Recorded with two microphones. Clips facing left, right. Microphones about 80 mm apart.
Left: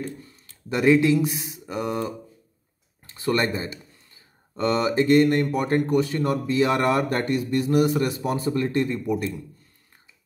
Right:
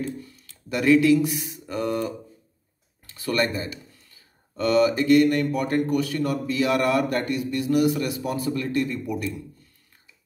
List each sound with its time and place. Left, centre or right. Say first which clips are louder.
0.2 s speech: right 1 dB; left